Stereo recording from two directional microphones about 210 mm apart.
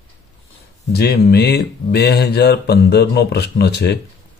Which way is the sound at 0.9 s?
50° left (ahead or behind).